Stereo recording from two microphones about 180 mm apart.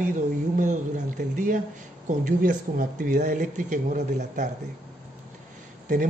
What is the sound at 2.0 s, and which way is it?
A man's voice, 45° right (ahead or behind).